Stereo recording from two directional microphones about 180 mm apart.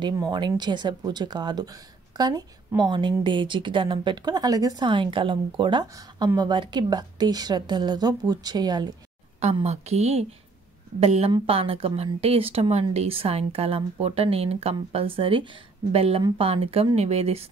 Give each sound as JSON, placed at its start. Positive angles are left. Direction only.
{"t": 0.0, "sound": "speech", "side_deg": -25}
{"t": 9.4, "sound": "speech", "side_deg": -35}